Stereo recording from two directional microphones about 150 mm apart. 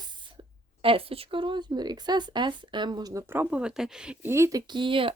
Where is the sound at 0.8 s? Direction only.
40° right (ahead or behind).